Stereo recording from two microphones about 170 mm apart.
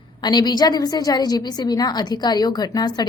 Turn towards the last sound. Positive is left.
turn(degrees=25)  # may be behind; listen again after turning